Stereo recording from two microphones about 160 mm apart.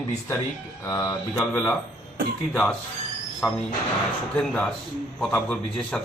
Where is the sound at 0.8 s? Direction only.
25° left (ahead or behind).